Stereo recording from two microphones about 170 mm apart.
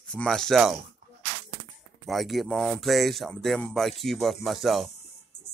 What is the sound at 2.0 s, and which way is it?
Speech, centre (ahead or behind).